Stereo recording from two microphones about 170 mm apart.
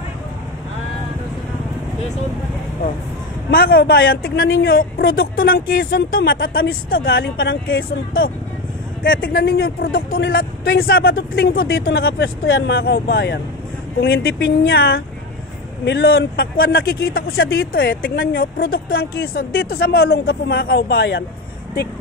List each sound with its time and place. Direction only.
3.4 s speech: 65° left (ahead or behind); by 13.4 s 80° left
14.0 s speech: 65° left (ahead or behind)
15.8 s speech: 80° left